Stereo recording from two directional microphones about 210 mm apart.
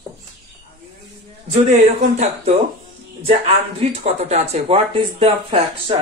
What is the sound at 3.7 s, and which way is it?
Speech, 30° right (ahead or behind).